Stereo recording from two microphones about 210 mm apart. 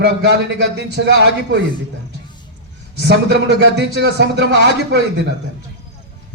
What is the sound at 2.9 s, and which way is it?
Speech, 55° right (ahead or behind).